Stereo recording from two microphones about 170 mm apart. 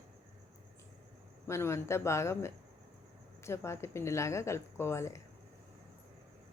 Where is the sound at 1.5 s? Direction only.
15° left (ahead or behind).